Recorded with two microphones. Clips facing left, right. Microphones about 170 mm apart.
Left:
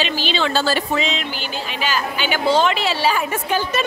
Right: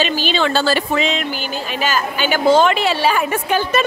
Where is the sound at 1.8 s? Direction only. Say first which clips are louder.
Right 3 dB; 45° right (ahead or behind).